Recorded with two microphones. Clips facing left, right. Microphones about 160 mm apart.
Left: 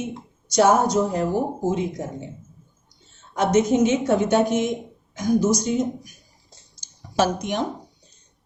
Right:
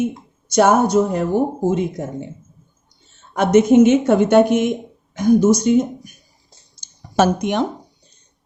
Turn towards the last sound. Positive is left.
turn(degrees=-65)  # may be behind; listen again after turning